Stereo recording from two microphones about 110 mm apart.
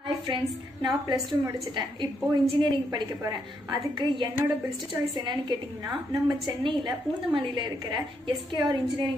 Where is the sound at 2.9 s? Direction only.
40° right (ahead or behind).